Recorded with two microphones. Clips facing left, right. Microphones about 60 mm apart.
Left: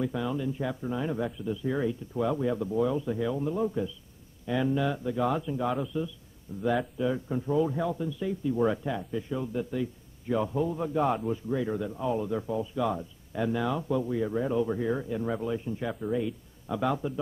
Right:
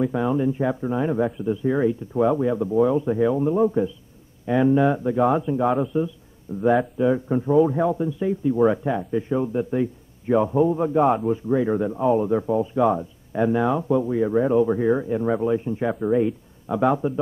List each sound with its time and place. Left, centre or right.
0.0 s a man's voice: right